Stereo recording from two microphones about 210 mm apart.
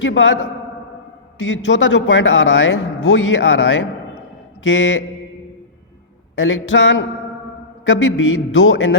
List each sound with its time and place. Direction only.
0.0 s a man's voice: 65° left (ahead or behind)
1.4 s a man's voice: 60° left (ahead or behind)
6.3 s a man's voice: 65° left (ahead or behind)